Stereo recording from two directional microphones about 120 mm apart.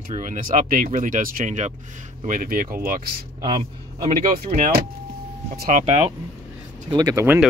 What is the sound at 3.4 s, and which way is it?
Speech, 50° right (ahead or behind).